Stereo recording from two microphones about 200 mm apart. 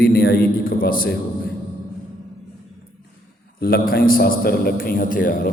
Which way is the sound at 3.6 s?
50° left (ahead or behind).